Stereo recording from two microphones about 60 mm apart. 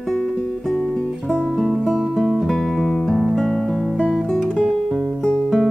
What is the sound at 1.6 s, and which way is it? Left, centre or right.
Guitar, centre.